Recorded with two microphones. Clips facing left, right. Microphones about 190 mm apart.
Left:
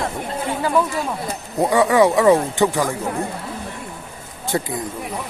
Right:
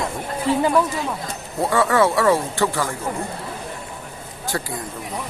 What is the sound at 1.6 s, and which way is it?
A man's voice, 15° left (ahead or behind).